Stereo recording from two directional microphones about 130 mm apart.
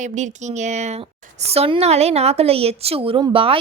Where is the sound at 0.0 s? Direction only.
65° right (ahead or behind).